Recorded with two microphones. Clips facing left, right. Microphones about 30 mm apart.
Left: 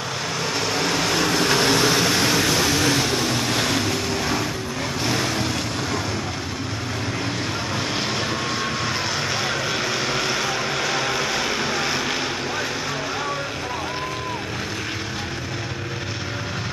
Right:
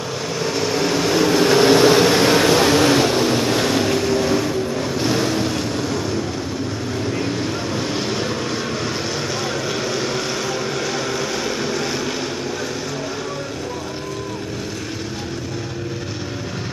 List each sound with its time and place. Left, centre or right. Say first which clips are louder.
0.4 s vehicle: right 4 dB; centre
7.7 s vehicle: right 2 dB; centre